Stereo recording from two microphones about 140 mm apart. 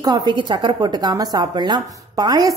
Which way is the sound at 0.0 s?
30° right (ahead or behind).